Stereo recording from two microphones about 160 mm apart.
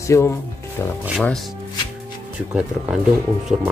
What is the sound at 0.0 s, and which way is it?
Speech, 20° left (ahead or behind).